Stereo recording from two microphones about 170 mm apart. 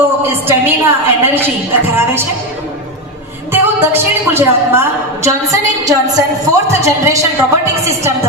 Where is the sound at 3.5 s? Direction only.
15° right (ahead or behind).